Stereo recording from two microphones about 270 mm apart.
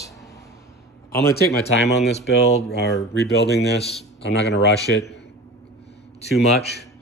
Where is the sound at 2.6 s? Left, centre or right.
Left.